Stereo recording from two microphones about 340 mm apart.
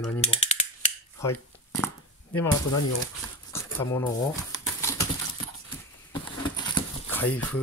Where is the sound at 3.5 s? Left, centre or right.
Centre.